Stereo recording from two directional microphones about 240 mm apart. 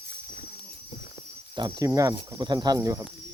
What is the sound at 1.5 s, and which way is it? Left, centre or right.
Speech, centre.